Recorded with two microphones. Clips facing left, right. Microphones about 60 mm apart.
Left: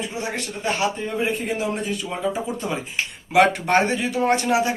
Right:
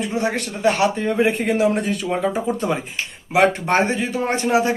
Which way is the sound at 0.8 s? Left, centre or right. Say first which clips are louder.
Right 6 dB; right.